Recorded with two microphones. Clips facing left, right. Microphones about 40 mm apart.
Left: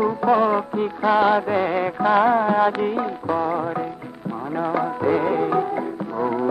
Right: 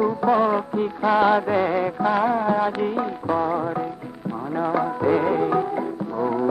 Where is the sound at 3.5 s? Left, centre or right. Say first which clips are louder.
Even; centre.